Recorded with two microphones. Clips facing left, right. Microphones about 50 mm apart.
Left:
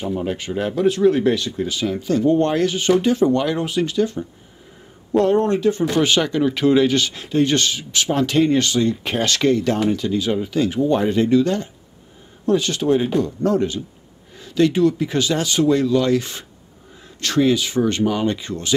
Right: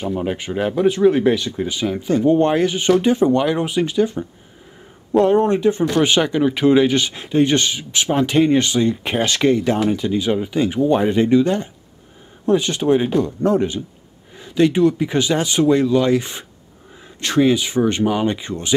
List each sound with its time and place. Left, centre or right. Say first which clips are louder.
0.2 s speech: right 2 dB; right